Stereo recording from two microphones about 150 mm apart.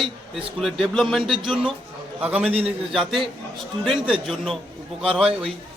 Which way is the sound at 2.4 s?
40° right (ahead or behind).